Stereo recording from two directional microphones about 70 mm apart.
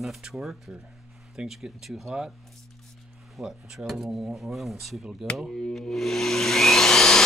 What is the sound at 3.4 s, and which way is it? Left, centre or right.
Speech, centre.